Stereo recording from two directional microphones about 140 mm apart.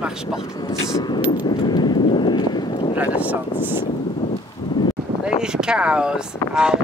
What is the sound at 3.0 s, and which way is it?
Speech, 10° right (ahead or behind).